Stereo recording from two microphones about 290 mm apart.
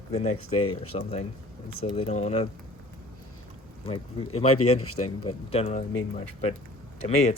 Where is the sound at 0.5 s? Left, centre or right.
Left.